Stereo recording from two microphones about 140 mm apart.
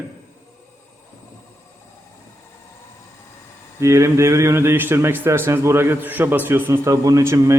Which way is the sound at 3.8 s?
20° right (ahead or behind).